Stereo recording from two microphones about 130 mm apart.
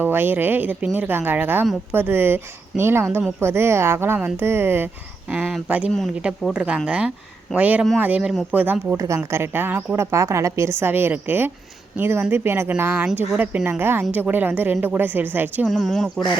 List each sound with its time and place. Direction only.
0.0 s a woman's voice: 15° right (ahead or behind)
9.0 s a woman's voice: 25° right (ahead or behind)
15.6 s speech: centre (ahead or behind)